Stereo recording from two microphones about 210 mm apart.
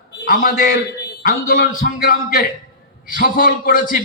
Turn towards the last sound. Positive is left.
turn(degrees=40)  # may be behind; listen again after turning